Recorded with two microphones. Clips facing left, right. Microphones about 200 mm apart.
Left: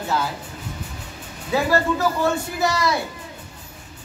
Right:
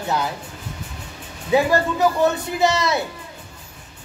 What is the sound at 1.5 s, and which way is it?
Speech, 20° right (ahead or behind).